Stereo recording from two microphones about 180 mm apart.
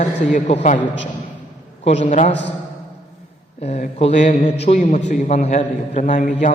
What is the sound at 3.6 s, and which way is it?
A man's voice, 35° left (ahead or behind).